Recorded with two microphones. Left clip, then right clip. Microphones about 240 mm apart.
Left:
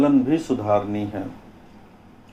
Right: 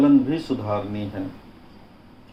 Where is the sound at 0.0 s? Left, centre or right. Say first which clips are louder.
Even; left.